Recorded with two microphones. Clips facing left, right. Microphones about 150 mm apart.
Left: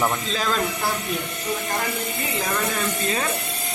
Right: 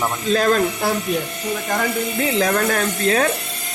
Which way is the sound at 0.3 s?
60° right (ahead or behind).